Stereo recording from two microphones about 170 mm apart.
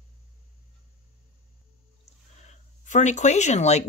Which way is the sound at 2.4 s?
45° left (ahead or behind).